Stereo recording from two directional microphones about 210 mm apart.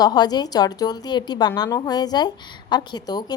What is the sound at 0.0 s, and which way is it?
A woman's voice, 20° left (ahead or behind).